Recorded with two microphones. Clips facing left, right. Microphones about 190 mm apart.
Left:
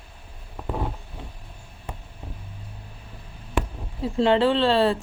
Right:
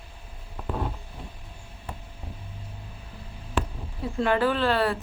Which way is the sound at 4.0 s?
25° left (ahead or behind).